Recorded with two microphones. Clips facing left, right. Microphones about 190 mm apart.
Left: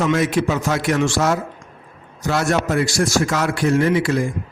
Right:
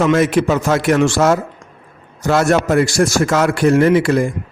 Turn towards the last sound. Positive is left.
turn(degrees=-55)  # may be behind; listen again after turning